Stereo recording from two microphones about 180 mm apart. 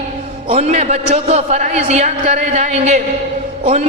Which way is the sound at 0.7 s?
40° right (ahead or behind).